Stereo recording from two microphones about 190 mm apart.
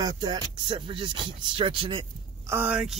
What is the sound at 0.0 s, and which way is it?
Speech, 20° right (ahead or behind).